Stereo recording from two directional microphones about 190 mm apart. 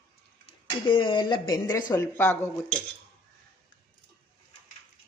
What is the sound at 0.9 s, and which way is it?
A woman's voice, 25° left (ahead or behind).